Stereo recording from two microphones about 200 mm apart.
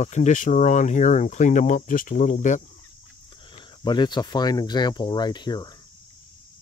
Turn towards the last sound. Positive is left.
turn(degrees=20)  # may be behind; listen again after turning